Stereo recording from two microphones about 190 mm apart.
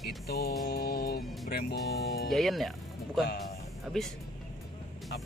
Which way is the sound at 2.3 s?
Centre (ahead or behind).